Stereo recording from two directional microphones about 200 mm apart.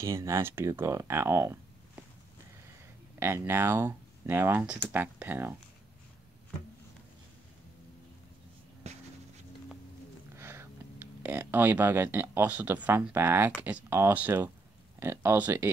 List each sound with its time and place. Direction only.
0.0 s speech: 15° right (ahead or behind)
3.2 s speech: 10° right (ahead or behind)
8.8 s a sound: 35° right (ahead or behind)
10.3 s speech: 10° right (ahead or behind)